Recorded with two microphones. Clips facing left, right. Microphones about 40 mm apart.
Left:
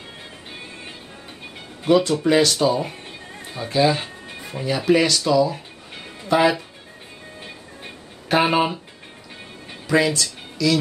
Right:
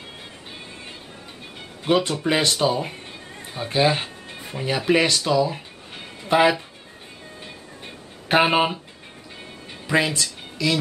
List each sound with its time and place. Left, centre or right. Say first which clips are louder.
1.9 s speech: left 4 dB; right
4.0 s music: left 1 dB; right
4.9 s speech: left 2 dB; right
8.4 s speech: even; centre
9.8 s speech: left 2 dB; right